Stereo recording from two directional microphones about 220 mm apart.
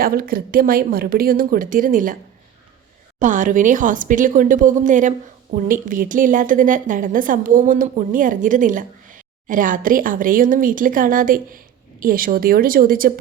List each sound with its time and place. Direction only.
0.0 s a woman's voice: 40° right (ahead or behind)
3.2 s a woman's voice: 35° right (ahead or behind)